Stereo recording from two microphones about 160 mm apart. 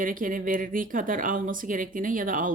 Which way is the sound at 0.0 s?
60° right (ahead or behind).